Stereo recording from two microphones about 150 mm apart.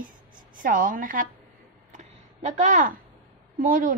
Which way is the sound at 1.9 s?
50° right (ahead or behind).